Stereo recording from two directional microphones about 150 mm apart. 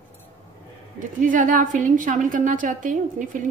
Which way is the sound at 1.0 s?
60° right (ahead or behind).